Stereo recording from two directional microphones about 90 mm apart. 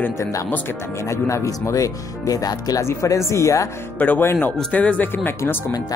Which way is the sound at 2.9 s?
35° left (ahead or behind).